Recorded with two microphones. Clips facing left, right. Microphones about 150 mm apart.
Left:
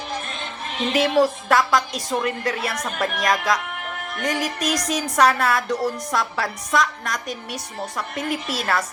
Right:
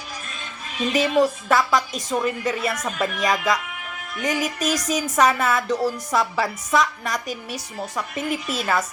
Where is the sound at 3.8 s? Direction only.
55° left (ahead or behind).